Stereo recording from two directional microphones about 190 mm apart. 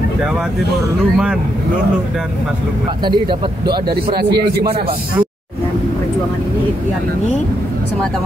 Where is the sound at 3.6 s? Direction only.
55° right (ahead or behind).